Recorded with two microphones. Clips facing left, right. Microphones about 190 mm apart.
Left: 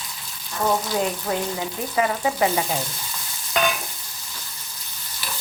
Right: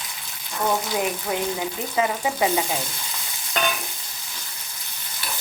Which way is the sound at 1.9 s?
15° right (ahead or behind).